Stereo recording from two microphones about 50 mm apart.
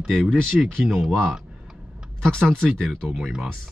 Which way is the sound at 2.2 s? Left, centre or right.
Centre.